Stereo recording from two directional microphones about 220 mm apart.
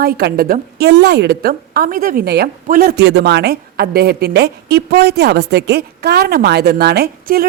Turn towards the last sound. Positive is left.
turn(degrees=-45)  # may be behind; listen again after turning